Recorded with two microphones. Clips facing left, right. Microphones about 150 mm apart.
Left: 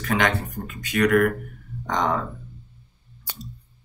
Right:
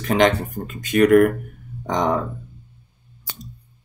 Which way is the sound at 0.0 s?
20° right (ahead or behind).